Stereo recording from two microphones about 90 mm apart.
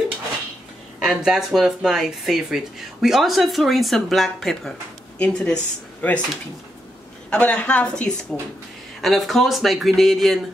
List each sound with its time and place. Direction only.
0.9 s speech: 5° right (ahead or behind); by 6.2 s 15° left (ahead or behind)
7.2 s speech: 15° left (ahead or behind)
9.0 s speech: centre (ahead or behind)